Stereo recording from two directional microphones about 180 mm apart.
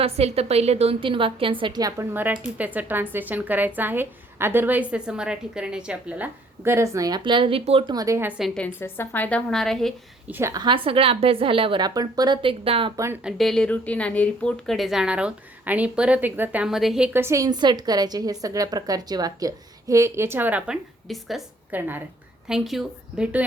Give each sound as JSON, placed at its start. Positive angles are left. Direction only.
{"t": 0.0, "sound": "a woman's voice", "side_deg": -35}
{"t": 10.2, "sound": "a woman's voice", "side_deg": -15}
{"t": 13.2, "sound": "a woman's voice", "side_deg": 0}
{"t": 21.8, "sound": "a woman's voice", "side_deg": -10}